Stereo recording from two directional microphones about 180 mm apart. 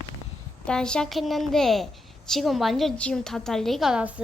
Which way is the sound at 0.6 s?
5° left (ahead or behind).